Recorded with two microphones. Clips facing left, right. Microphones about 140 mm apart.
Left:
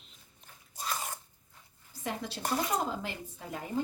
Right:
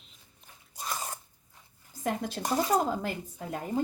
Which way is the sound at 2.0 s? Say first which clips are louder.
Right 4 dB; 45° right (ahead or behind).